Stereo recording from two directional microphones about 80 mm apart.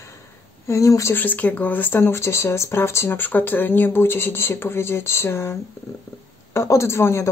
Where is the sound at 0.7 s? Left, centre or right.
Left.